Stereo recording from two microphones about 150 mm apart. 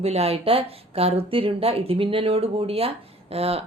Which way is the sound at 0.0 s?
45° right (ahead or behind).